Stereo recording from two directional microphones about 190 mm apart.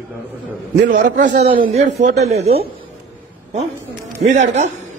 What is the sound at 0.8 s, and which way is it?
Speech, 45° right (ahead or behind).